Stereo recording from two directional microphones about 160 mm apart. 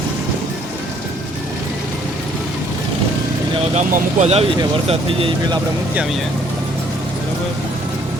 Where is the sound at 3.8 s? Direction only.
45° right (ahead or behind).